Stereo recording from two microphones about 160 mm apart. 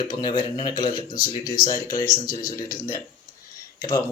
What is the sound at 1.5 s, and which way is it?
Speech, 60° left (ahead or behind).